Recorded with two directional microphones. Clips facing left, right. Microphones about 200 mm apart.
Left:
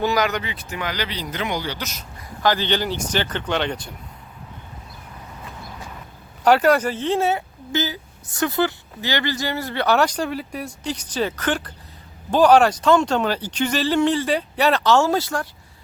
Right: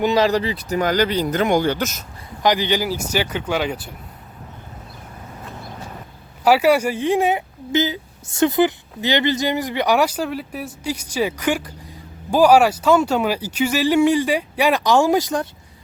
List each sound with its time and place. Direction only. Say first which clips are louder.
0.0 s speech: right 4 dB; 25° right (ahead or behind); by 2.0 s 45° right (ahead or behind)
2.4 s speech: right 2 dB; 15° right (ahead or behind)
6.4 s speech: right 1 dB; 5° right (ahead or behind)